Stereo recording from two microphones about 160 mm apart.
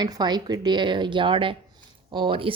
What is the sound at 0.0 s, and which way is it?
Speech, 25° right (ahead or behind).